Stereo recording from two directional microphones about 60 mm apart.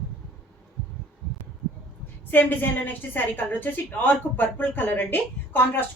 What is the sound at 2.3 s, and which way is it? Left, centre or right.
A woman's voice, left.